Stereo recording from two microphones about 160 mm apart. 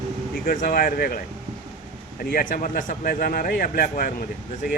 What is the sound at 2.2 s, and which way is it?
Speech, 65° left (ahead or behind).